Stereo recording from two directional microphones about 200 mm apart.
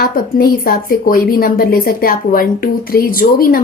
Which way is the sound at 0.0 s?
45° left (ahead or behind).